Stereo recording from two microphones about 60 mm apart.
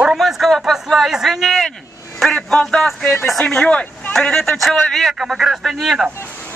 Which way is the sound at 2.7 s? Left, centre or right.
Centre.